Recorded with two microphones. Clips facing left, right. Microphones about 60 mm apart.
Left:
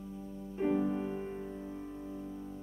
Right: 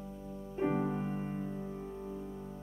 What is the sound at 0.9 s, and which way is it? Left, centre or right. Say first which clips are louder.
Music: left 1 dB; centre.